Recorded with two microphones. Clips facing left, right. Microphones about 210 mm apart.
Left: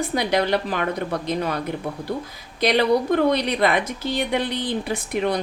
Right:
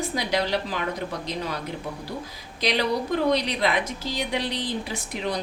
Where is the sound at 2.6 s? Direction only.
55° left (ahead or behind).